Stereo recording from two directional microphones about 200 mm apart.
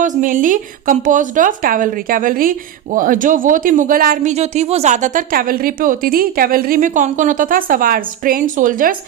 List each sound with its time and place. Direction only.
0.0 s a woman's voice: 40° right (ahead or behind)